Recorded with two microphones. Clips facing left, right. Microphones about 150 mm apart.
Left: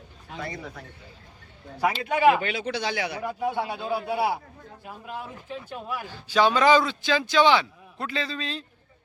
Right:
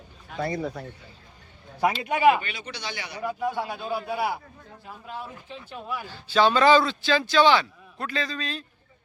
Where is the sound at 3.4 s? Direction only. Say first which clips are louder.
Left 2 dB; 20° left (ahead or behind).